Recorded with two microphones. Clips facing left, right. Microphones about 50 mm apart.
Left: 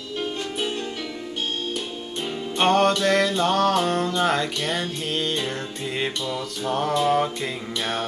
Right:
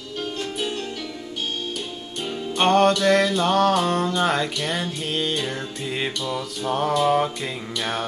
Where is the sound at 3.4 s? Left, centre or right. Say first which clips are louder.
Right 1 dB; centre.